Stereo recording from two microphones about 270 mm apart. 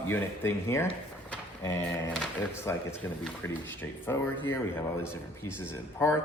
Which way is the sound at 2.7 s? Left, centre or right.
Centre.